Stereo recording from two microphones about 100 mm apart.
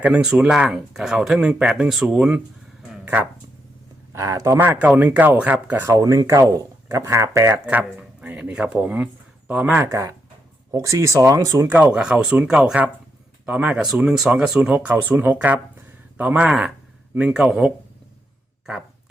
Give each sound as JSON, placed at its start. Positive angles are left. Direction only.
{"t": 0.0, "sound": "speech", "side_deg": -10}
{"t": 4.1, "sound": "speech", "side_deg": -35}
{"t": 5.8, "sound": "speech", "side_deg": -30}
{"t": 7.9, "sound": "speech", "side_deg": -15}
{"t": 11.7, "sound": "speech", "side_deg": -10}
{"t": 16.5, "sound": "speech", "side_deg": -5}
{"t": 18.6, "sound": "a sound", "side_deg": -5}